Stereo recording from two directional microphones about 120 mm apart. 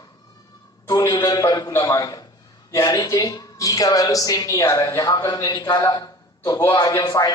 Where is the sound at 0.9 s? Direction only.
35° left (ahead or behind).